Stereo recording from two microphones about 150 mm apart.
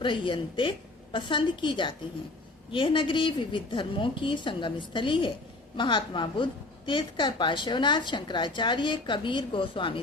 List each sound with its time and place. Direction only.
0.0 s a woman's voice: 35° left (ahead or behind)